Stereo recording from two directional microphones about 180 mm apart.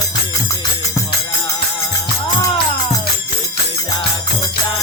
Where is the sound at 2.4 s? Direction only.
20° left (ahead or behind).